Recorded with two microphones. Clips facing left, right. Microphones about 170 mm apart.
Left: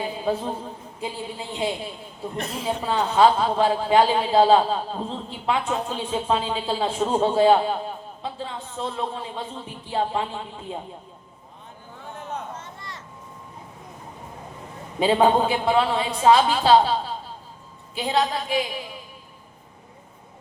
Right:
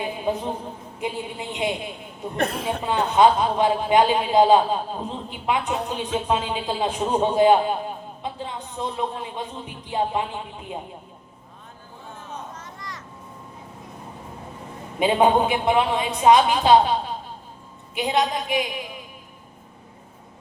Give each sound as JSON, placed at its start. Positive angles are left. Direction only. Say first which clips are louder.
{"t": 0.3, "sound": "a woman's voice", "louder": "left 1 dB", "side_deg": -20}
{"t": 2.4, "sound": "speech", "louder": "right 3 dB", "side_deg": -60}
{"t": 2.8, "sound": "a man's voice", "louder": "right 1 dB", "side_deg": -15}
{"t": 12.5, "sound": "a sound", "louder": "even", "side_deg": 30}
{"t": 14.9, "sound": "a man's voice", "louder": "even", "side_deg": -15}
{"t": 17.9, "sound": "a man's voice", "louder": "right 1 dB", "side_deg": -15}